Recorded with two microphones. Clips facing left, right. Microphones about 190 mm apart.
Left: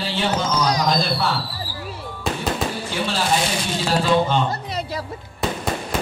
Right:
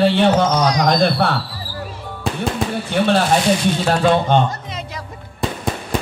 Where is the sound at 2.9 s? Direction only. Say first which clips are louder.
Right 8 dB; 60° right (ahead or behind).